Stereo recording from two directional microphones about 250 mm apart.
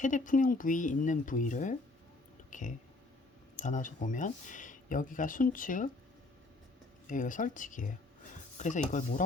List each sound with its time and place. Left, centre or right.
0.0 s speech: left
7.1 s speech: left